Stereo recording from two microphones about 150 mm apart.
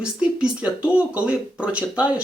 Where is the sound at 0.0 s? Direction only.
5° right (ahead or behind).